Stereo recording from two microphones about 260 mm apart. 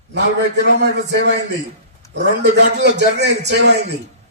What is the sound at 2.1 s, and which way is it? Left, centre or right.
Speech, right.